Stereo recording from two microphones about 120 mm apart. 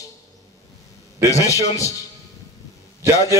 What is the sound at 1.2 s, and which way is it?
Speech, 25° left (ahead or behind).